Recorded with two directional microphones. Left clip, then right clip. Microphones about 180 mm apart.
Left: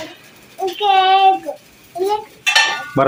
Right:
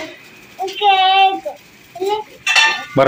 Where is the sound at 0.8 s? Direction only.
20° left (ahead or behind).